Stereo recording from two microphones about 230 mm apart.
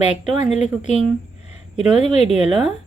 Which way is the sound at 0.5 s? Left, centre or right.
Left.